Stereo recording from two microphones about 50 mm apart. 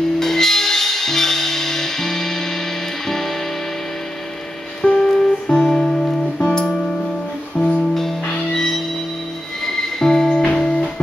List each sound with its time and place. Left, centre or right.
0.2 s music: centre
4.9 s music: centre
6.4 s music: centre